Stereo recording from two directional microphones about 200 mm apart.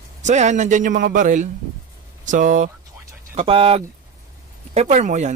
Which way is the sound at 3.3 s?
30° right (ahead or behind).